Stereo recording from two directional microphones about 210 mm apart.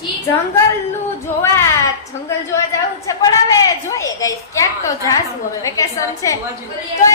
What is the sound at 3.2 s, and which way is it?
A woman's voice, 15° left (ahead or behind).